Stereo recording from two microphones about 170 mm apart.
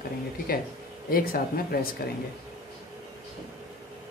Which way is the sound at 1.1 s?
60° left (ahead or behind).